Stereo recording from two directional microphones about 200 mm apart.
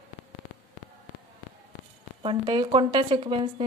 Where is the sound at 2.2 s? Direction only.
25° right (ahead or behind).